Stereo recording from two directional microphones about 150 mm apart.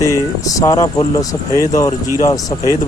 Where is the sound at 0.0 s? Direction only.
25° left (ahead or behind).